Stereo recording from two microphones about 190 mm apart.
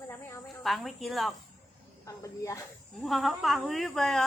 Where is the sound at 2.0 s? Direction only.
15° left (ahead or behind).